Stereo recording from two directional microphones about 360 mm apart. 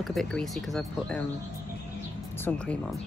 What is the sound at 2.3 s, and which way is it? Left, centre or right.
Speech, centre.